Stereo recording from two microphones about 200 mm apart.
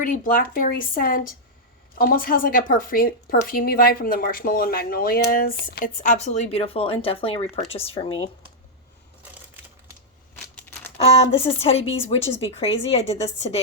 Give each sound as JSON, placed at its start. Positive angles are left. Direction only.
{"t": 0.0, "sound": "a woman's voice", "side_deg": 45}
{"t": 10.6, "sound": "crumpling", "side_deg": 10}
{"t": 10.9, "sound": "speech", "side_deg": 30}